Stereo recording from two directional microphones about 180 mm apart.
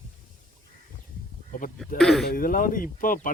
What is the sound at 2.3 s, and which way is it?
Speech, 50° left (ahead or behind).